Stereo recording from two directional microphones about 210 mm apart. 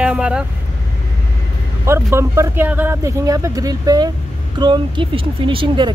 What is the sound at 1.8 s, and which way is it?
Speech, 15° right (ahead or behind).